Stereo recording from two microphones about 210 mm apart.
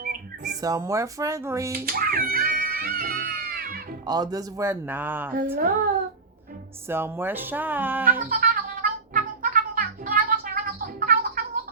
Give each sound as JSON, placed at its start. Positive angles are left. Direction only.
{"t": 0.0, "sound": "bird", "side_deg": -40}
{"t": 0.6, "sound": "speech", "side_deg": -15}
{"t": 1.9, "sound": "music", "side_deg": -45}
{"t": 4.0, "sound": "speech", "side_deg": -20}
{"t": 5.5, "sound": "a woman's voice", "side_deg": -40}
{"t": 6.8, "sound": "speech", "side_deg": -10}
{"t": 8.3, "sound": "music", "side_deg": -40}